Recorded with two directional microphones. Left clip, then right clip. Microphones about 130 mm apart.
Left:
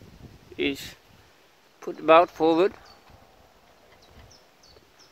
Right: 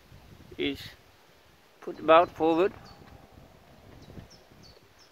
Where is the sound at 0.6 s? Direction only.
45° left (ahead or behind).